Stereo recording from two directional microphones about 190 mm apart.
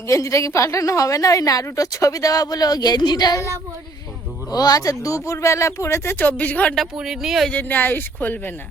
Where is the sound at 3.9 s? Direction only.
20° left (ahead or behind).